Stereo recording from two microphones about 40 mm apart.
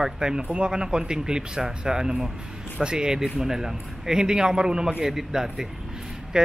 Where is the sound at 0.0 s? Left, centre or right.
Centre.